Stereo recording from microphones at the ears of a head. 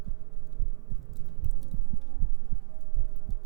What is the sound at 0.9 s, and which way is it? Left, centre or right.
Heart sounds, right.